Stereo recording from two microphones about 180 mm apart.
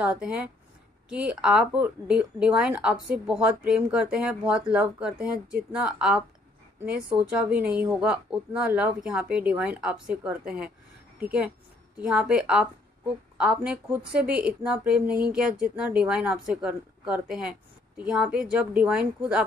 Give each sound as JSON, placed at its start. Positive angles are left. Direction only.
{"t": 0.0, "sound": "a woman's voice", "side_deg": -5}